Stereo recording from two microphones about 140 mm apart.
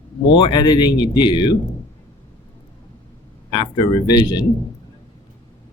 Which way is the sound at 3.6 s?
30° left (ahead or behind).